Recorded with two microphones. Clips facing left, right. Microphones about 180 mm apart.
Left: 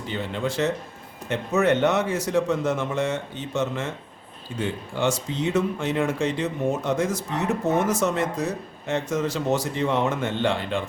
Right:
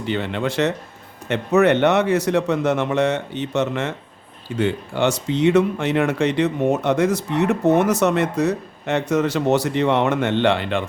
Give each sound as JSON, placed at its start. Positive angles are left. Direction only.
{"t": 0.0, "sound": "speech", "side_deg": -70}